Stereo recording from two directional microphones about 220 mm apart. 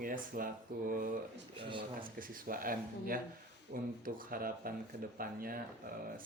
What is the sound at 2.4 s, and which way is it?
Speech, 40° right (ahead or behind).